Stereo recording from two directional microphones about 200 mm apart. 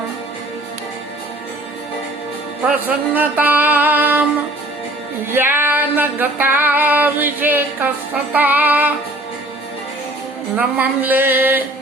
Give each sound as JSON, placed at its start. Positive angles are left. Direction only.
{"t": 2.6, "sound": "female singing", "side_deg": -10}
{"t": 10.5, "sound": "female singing", "side_deg": -10}